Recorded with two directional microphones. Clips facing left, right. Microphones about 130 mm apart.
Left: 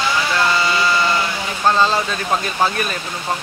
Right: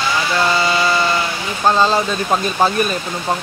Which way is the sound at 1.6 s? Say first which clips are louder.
Right 2 dB; 15° right (ahead or behind).